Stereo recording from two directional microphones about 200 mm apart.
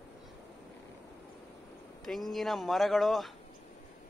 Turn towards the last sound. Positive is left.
turn(degrees=0)  # may be behind; listen again after turning